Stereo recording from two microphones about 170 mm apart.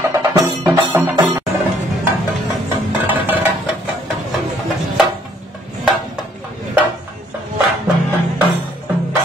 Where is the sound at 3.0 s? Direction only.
10° right (ahead or behind).